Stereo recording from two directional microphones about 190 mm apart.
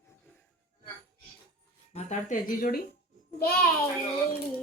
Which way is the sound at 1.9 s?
40° left (ahead or behind).